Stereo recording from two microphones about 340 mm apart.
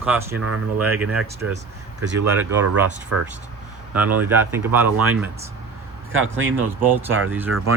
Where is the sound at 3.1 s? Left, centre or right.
Right.